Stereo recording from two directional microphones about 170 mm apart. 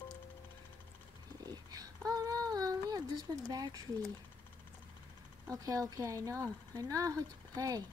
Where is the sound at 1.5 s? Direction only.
20° right (ahead or behind).